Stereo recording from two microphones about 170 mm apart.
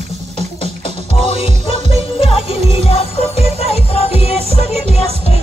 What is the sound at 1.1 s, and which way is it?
Music, 35° left (ahead or behind).